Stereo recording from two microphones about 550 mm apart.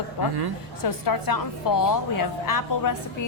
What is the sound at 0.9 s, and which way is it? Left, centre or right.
A woman's voice, left.